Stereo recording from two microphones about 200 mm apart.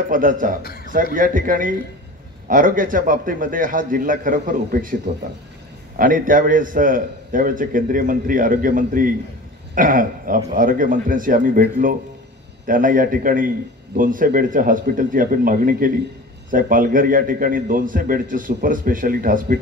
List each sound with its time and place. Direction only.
0.1 s a man's voice: 45° right (ahead or behind)
5.9 s a man's voice: 45° right (ahead or behind)